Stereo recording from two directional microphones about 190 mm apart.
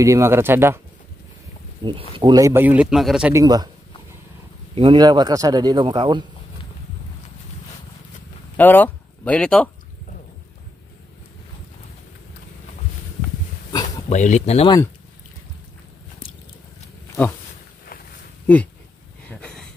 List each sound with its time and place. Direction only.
0.0 s speech: 15° right (ahead or behind)
1.8 s a man's voice: 20° right (ahead or behind); by 3.3 s 5° right (ahead or behind)
3.3 s a man's voice: 20° right (ahead or behind)
4.7 s a man's voice: 25° right (ahead or behind)
8.5 s speech: 10° left (ahead or behind)
13.8 s speech: 40° left (ahead or behind)